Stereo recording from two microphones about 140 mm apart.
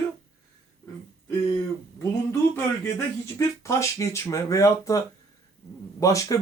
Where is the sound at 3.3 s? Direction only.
20° left (ahead or behind).